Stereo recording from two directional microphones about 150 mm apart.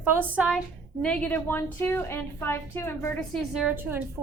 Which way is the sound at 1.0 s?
5° left (ahead or behind).